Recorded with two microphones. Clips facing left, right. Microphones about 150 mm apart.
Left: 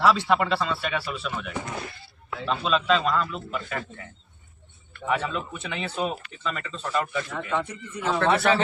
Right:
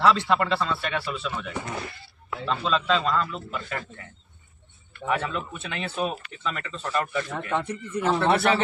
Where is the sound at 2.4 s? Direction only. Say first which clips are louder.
Left 1 dB; 5° left (ahead or behind).